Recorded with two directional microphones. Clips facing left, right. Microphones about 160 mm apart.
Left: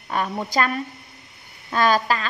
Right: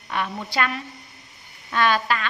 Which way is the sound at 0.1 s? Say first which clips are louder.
Left 3 dB; 40° left (ahead or behind).